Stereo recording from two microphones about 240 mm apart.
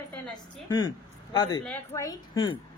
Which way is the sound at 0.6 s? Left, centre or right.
Centre.